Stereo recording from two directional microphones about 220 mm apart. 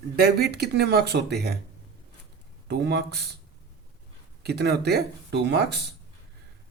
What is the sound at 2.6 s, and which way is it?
Speech, 50° right (ahead or behind).